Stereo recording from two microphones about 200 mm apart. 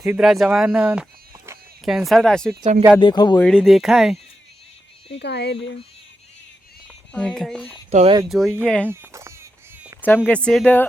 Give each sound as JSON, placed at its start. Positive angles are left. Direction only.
{"t": 0.0, "sound": "speech", "side_deg": -5}
{"t": 3.0, "sound": "speech", "side_deg": 20}
{"t": 3.4, "sound": "speech", "side_deg": 0}
{"t": 5.1, "sound": "speech", "side_deg": 55}
{"t": 6.8, "sound": "speech", "side_deg": 5}
{"t": 7.9, "sound": "speech", "side_deg": -30}
{"t": 8.3, "sound": "speech", "side_deg": 0}
{"t": 8.9, "sound": "a sound", "side_deg": -15}
{"t": 10.2, "sound": "speech", "side_deg": 5}